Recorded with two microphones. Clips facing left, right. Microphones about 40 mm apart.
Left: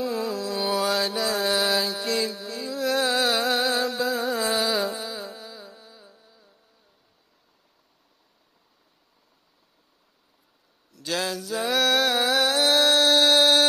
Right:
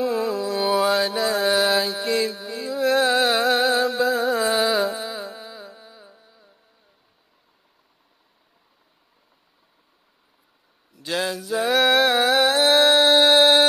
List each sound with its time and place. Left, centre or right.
0.0 s music: centre
0.7 s mantra: centre
4.4 s carnatic music: centre
10.9 s a sound: centre